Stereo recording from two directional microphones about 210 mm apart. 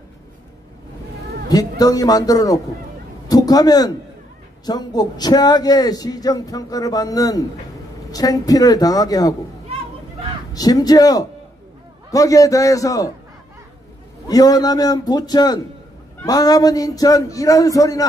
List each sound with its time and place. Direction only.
1.5 s a man's voice: 20° left (ahead or behind)
10.5 s speech: 20° left (ahead or behind)
14.2 s a man's voice: 15° left (ahead or behind)